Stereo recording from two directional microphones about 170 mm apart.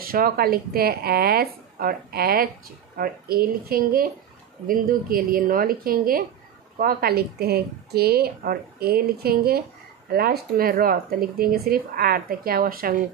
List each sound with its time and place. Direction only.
0.0 s speech: 60° right (ahead or behind)